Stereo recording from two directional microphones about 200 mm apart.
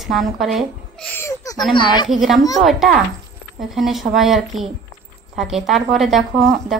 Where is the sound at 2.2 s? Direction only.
Centre (ahead or behind).